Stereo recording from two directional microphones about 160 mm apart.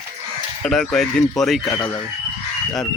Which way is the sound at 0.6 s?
5° left (ahead or behind).